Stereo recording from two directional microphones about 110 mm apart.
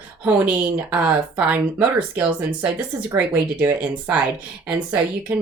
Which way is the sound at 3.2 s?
15° right (ahead or behind).